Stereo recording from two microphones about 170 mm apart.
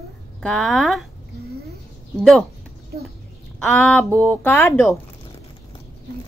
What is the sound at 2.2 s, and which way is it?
Speech, centre (ahead or behind).